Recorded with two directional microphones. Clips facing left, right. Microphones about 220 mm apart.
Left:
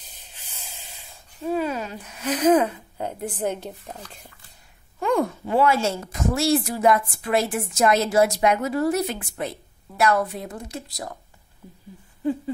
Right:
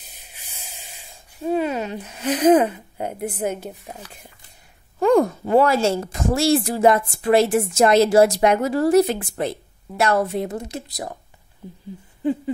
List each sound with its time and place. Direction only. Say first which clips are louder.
0.2 s speech: right 1 dB; 10° right (ahead or behind)
5.0 s a woman's voice: right 6 dB; 40° right (ahead or behind); by 11.1 s 20° right (ahead or behind)